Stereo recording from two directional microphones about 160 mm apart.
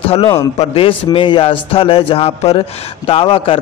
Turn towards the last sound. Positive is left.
turn(degrees=35)  # may be behind; listen again after turning